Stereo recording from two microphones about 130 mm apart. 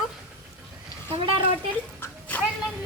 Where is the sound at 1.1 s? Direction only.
40° right (ahead or behind).